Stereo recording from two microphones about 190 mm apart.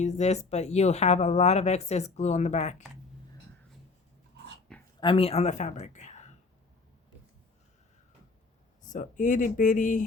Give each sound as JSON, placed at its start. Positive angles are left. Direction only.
{"t": 0.0, "sound": "speech", "side_deg": 35}
{"t": 4.9, "sound": "speech", "side_deg": 30}
{"t": 8.8, "sound": "speech", "side_deg": 40}